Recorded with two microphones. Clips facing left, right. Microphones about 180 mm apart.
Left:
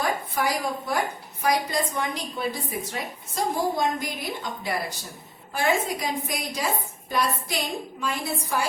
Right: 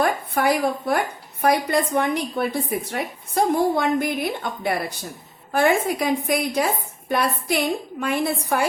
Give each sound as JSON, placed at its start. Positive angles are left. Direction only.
{"t": 0.0, "sound": "a woman's voice", "side_deg": -60}